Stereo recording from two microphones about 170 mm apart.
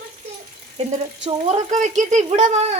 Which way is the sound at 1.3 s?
45° right (ahead or behind).